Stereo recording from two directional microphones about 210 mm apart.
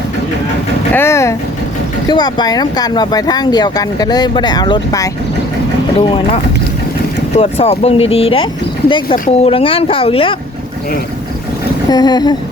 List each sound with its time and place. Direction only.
0.9 s speech: 10° left (ahead or behind)
7.3 s speech: 30° left (ahead or behind)
9.1 s speech: 40° left (ahead or behind)
9.5 s speech: 25° left (ahead or behind)
11.9 s speech: 20° left (ahead or behind)